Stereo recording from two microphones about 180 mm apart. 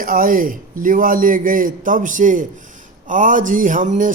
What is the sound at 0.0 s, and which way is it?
Speech, 50° right (ahead or behind).